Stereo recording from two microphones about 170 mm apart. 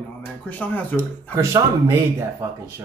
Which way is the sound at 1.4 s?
15° right (ahead or behind).